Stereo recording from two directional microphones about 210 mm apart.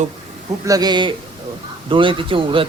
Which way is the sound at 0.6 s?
20° right (ahead or behind).